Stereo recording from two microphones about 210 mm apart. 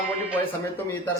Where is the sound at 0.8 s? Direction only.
10° left (ahead or behind).